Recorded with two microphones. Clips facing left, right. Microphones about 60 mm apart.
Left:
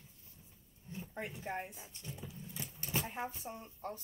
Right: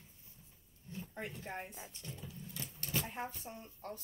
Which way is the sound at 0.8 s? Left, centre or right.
Centre.